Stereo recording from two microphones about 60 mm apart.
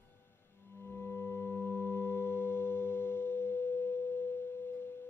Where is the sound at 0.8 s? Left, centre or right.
Left.